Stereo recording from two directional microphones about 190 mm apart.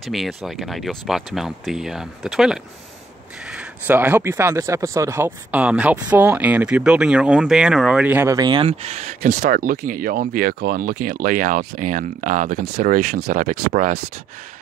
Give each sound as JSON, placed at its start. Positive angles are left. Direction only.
{"t": 0.0, "sound": "speech", "side_deg": 0}
{"t": 9.3, "sound": "speech", "side_deg": -50}